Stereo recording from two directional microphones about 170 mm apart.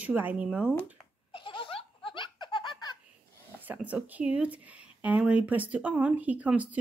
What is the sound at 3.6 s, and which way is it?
Speech, 10° right (ahead or behind).